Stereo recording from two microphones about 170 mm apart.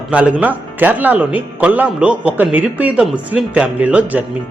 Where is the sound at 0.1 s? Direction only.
10° right (ahead or behind).